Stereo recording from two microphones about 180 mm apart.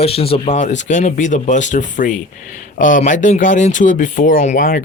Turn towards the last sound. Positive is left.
turn(degrees=50)  # may be behind; listen again after turning